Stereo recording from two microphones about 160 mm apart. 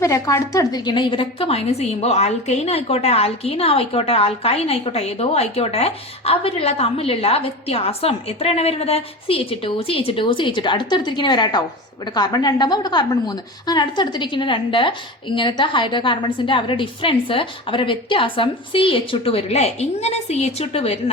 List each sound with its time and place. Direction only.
0.0 s a woman's voice: 20° left (ahead or behind); by 21.0 s 40° left (ahead or behind)